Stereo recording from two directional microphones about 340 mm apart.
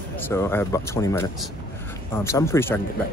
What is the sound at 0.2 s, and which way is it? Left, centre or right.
Speech, centre.